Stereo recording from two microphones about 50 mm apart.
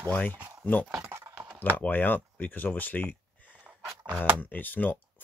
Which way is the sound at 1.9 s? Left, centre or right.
Left.